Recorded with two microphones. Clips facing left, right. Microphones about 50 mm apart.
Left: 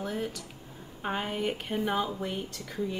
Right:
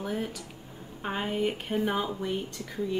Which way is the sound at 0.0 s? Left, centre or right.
Centre.